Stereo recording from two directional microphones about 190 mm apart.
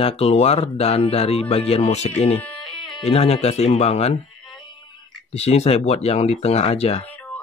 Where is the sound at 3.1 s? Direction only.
30° left (ahead or behind).